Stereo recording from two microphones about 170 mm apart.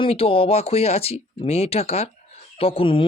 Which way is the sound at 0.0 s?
35° left (ahead or behind).